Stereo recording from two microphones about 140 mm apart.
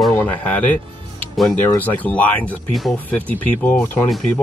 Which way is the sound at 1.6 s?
15° left (ahead or behind).